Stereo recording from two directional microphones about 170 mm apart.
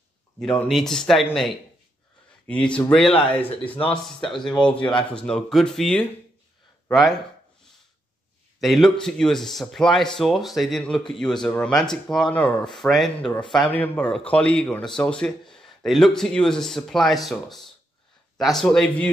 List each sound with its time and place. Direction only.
0.4 s speech: 5° left (ahead or behind)
3.1 s speech: 30° left (ahead or behind)
3.3 s speech: 10° left (ahead or behind)
8.5 s speech: centre (ahead or behind)